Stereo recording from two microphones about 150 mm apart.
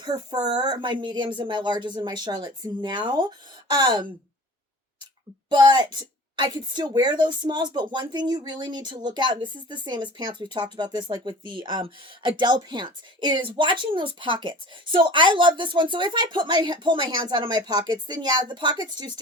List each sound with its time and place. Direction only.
0.0 s speech: 30° right (ahead or behind)
5.5 s a woman's voice: 30° right (ahead or behind)